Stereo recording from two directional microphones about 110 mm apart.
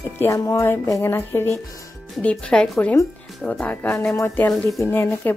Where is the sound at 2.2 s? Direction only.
5° left (ahead or behind).